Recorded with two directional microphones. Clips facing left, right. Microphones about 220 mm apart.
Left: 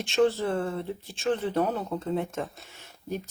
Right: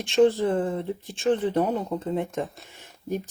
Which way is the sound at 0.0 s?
15° right (ahead or behind).